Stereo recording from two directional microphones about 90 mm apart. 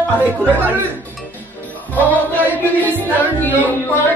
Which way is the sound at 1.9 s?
20° left (ahead or behind).